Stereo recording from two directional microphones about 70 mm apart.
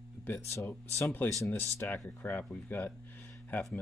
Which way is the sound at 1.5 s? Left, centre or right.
Left.